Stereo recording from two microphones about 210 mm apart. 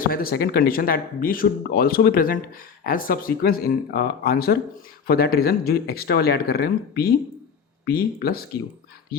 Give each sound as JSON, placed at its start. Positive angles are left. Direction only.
{"t": 0.0, "sound": "speech", "side_deg": 45}